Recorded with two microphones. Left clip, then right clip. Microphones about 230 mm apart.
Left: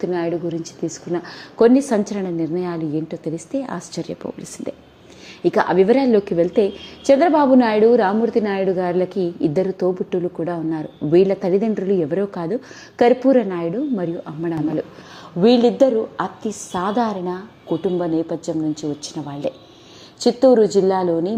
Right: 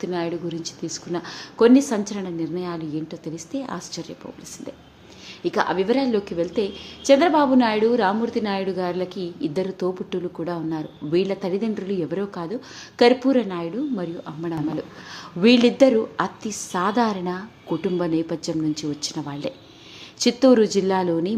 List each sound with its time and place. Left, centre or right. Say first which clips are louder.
0.0 s a woman's voice: left 5 dB; centre
20.7 s a woman's voice: left 4 dB; centre